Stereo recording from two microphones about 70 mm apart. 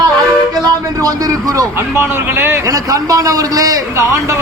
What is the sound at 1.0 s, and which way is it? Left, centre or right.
Speech, right.